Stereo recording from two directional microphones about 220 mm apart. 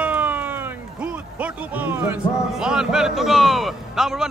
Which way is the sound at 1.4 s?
10° right (ahead or behind).